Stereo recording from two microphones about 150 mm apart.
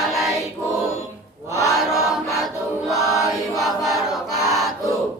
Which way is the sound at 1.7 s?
Centre (ahead or behind).